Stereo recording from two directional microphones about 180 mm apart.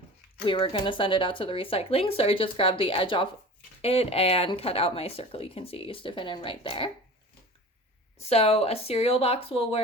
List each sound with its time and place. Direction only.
0.4 s speech: 30° left (ahead or behind)
8.2 s speech: 35° left (ahead or behind)